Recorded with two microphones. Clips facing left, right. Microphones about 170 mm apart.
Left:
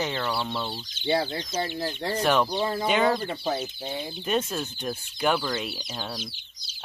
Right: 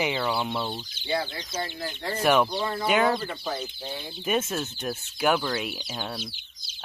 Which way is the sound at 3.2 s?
30° left (ahead or behind).